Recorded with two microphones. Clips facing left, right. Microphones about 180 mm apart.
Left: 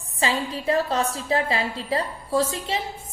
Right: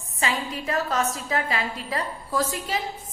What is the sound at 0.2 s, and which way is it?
A woman's voice, 30° left (ahead or behind).